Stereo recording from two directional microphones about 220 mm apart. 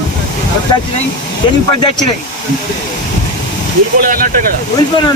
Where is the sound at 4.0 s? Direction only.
40° right (ahead or behind).